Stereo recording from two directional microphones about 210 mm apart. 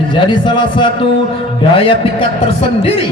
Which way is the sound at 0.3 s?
20° left (ahead or behind).